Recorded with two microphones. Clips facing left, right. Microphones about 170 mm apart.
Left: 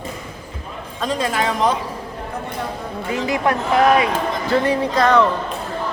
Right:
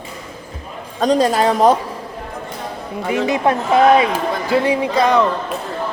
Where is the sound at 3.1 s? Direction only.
20° right (ahead or behind).